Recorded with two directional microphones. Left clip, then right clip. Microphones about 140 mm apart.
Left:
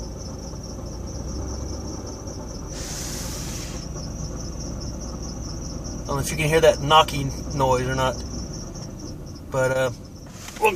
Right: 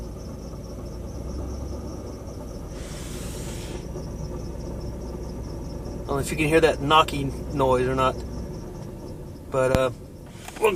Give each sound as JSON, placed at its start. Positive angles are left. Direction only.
{"t": 6.1, "sound": "speech", "side_deg": -20}
{"t": 9.5, "sound": "speech", "side_deg": -15}